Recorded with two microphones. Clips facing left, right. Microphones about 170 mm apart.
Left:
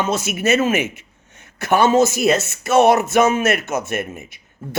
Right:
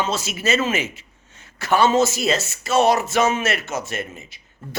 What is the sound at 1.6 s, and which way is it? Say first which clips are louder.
Speech: left 3 dB; 20° left (ahead or behind).